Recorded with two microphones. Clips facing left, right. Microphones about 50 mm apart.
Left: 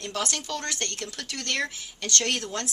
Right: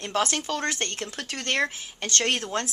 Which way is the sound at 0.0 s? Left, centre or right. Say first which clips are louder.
Right 5 dB; right.